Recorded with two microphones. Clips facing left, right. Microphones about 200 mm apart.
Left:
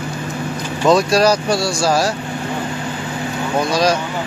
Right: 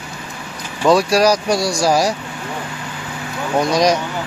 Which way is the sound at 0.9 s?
10° right (ahead or behind).